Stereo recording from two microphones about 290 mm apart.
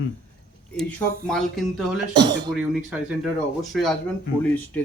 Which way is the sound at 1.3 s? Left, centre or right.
Centre.